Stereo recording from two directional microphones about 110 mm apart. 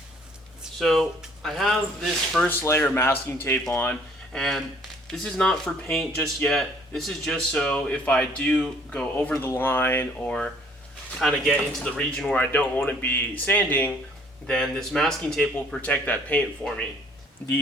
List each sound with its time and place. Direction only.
0.6 s speech: centre (ahead or behind)
2.5 s speech: 20° left (ahead or behind)
4.3 s speech: 5° left (ahead or behind); by 10.1 s 20° left (ahead or behind)
10.2 s speech: 5° left (ahead or behind)
14.4 s speech: 5° left (ahead or behind)